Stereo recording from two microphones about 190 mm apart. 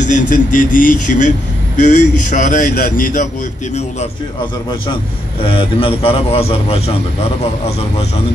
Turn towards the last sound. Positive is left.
turn(degrees=30)  # may be behind; listen again after turning